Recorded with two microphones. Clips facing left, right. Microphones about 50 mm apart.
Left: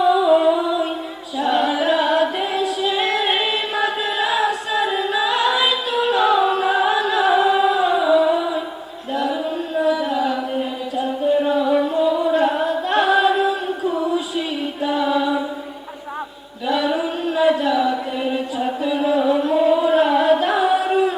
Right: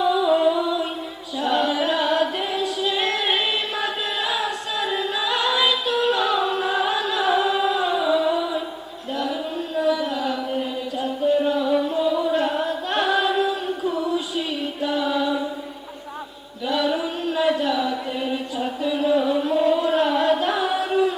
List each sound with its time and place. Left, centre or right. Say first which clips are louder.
0.0 s music: left 4 dB; centre
1.4 s singing: left 3 dB; centre
5.1 s music: left 4 dB; centre
9.1 s a sound: left 4 dB; centre
13.9 s music: left 4 dB; centre
14.3 s child singing: left 2 dB; centre
16.6 s chant: left 3 dB; centre
18.9 s music: left 2 dB; centre
19.5 s singing: left 4 dB; centre